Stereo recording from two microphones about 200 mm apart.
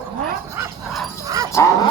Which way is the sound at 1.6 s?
15° left (ahead or behind).